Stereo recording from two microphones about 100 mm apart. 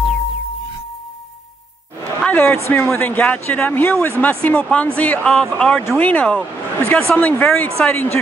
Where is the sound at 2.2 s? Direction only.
20° left (ahead or behind).